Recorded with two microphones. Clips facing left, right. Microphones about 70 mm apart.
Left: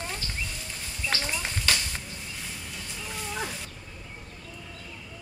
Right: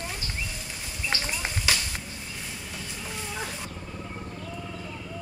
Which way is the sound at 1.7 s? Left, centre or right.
Centre.